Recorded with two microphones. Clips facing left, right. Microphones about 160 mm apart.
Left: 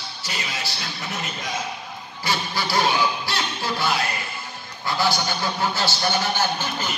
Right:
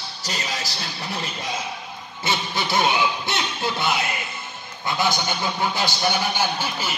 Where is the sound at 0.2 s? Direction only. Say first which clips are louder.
Right 2 dB; 40° right (ahead or behind).